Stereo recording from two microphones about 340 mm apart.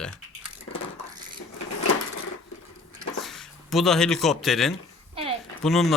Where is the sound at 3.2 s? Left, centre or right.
Centre.